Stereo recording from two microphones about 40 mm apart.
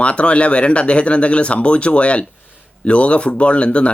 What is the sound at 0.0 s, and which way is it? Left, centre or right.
Speech, left.